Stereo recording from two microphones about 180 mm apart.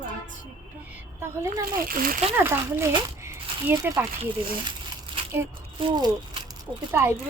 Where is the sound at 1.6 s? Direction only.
50° right (ahead or behind).